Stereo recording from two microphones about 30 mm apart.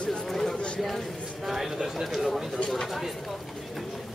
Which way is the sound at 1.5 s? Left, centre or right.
Centre.